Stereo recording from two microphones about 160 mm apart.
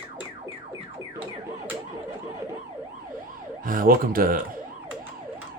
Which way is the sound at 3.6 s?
60° right (ahead or behind).